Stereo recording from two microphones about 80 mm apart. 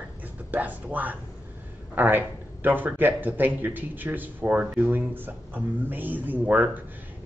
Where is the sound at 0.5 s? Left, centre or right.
Right.